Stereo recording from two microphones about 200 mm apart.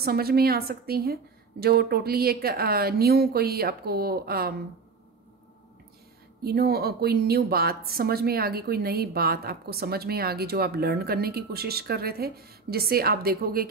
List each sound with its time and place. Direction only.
0.0 s a woman's voice: 50° right (ahead or behind)
6.4 s a woman's voice: 50° right (ahead or behind)